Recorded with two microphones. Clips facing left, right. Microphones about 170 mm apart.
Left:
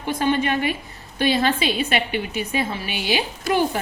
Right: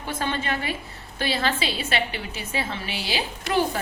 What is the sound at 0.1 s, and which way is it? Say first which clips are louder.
A woman's voice: left 7 dB; 15° left (ahead or behind).